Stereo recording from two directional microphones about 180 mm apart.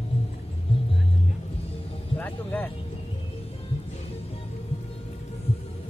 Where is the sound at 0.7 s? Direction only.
30° left (ahead or behind).